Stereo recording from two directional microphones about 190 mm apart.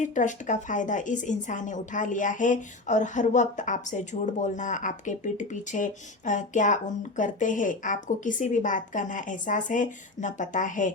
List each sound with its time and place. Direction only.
0.0 s a woman's voice: 40° left (ahead or behind)